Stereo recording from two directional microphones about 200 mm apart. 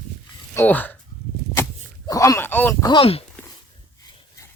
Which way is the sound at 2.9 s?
30° left (ahead or behind).